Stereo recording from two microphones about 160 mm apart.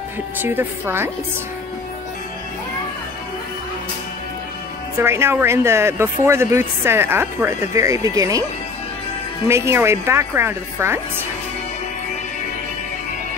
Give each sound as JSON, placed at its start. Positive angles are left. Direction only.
{"t": 0.4, "sound": "speech", "side_deg": -15}
{"t": 5.0, "sound": "speech", "side_deg": -15}
{"t": 9.5, "sound": "speech", "side_deg": -15}